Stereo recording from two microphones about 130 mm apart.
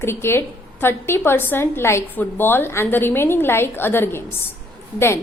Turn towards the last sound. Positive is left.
turn(degrees=20)  # may be behind; listen again after turning